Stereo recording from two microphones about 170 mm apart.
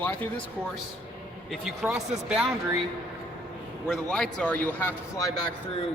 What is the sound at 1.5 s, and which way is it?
Speech, centre (ahead or behind).